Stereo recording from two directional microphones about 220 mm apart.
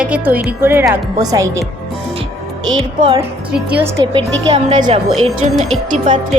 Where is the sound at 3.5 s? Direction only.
5° right (ahead or behind).